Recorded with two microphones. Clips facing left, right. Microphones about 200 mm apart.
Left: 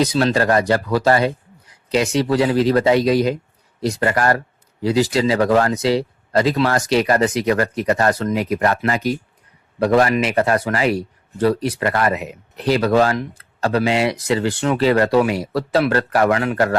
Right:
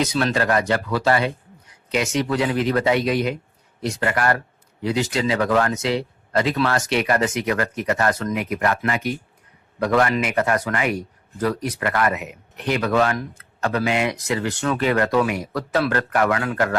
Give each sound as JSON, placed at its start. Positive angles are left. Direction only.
{"t": 0.0, "sound": "speech", "side_deg": 35}